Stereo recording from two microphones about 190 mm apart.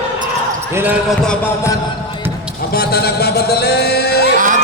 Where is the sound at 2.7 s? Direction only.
55° left (ahead or behind).